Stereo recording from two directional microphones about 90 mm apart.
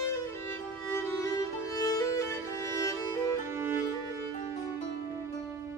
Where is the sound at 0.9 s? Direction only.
30° left (ahead or behind).